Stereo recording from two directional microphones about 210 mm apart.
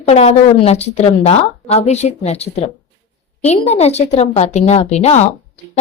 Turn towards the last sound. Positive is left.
turn(degrees=30)  # may be behind; listen again after turning